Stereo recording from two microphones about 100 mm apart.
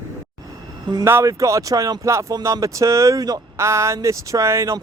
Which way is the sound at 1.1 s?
30° right (ahead or behind).